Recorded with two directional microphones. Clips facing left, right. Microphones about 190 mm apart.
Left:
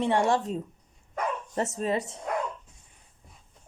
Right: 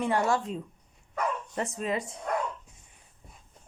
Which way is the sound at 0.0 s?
25° left (ahead or behind).